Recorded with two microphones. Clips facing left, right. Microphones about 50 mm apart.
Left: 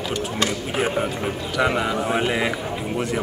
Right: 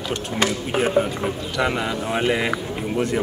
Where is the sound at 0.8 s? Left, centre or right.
Centre.